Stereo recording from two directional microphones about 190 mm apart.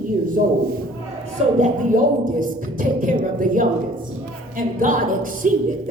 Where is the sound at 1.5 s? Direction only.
40° right (ahead or behind).